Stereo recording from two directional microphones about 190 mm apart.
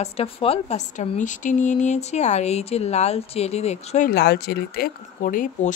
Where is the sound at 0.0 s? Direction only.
30° left (ahead or behind).